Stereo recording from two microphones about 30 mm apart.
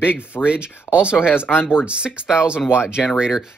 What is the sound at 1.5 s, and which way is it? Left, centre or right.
Speech, left.